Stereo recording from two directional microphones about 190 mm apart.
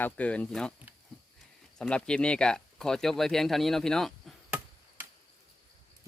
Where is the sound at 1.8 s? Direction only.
5° left (ahead or behind).